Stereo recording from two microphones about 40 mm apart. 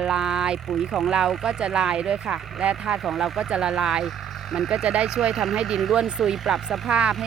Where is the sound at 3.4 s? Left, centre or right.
Centre.